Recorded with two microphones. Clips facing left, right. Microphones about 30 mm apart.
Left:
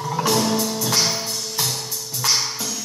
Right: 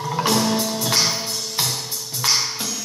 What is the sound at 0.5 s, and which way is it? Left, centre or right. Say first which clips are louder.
Music: even; centre.